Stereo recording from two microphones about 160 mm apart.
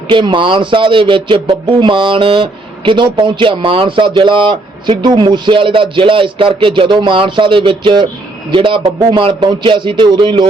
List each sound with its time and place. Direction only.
0.1 s a man's voice: 30° right (ahead or behind)